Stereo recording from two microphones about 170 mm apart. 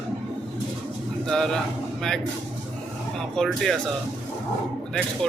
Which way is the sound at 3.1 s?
5° left (ahead or behind).